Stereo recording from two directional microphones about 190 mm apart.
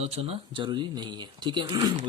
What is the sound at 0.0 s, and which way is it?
Speech, 30° right (ahead or behind).